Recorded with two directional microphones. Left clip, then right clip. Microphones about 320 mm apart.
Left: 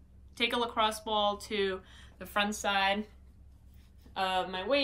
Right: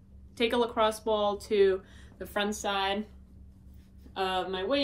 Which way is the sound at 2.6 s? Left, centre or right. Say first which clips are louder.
Left 2 dB; left.